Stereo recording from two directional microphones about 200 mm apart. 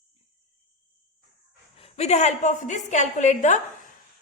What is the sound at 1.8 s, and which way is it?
A woman's voice, 35° left (ahead or behind).